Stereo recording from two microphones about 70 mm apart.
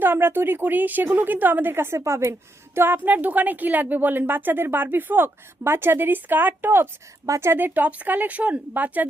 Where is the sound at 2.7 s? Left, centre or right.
Right.